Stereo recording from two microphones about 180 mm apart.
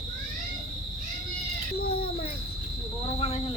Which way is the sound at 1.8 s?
55° left (ahead or behind).